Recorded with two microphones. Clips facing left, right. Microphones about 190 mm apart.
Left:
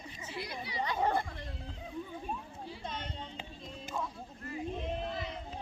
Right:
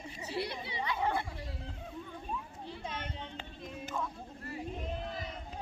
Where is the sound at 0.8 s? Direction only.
40° left (ahead or behind).